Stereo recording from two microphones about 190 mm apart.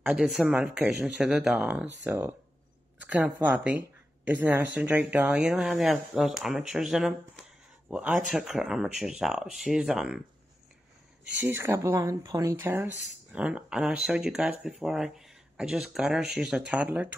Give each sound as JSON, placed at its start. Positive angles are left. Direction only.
{"t": 0.0, "sound": "speech", "side_deg": -5}
{"t": 11.4, "sound": "speech", "side_deg": -15}